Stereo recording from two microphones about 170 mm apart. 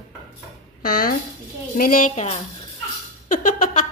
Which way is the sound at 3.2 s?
50° left (ahead or behind).